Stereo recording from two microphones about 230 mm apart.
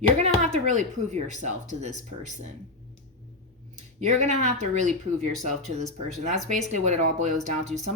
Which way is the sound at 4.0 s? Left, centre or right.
Right.